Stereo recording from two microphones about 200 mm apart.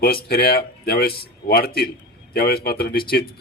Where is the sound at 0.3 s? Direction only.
50° left (ahead or behind).